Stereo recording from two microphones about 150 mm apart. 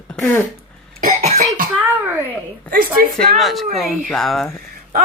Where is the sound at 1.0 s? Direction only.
60° right (ahead or behind).